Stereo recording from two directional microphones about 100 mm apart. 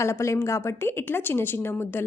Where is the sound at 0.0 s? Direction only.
30° left (ahead or behind).